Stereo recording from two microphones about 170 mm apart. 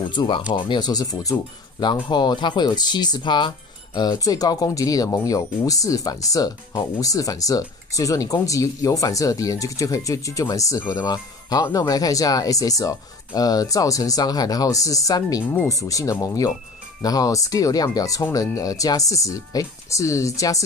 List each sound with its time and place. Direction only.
0.1 s speech: 30° left (ahead or behind)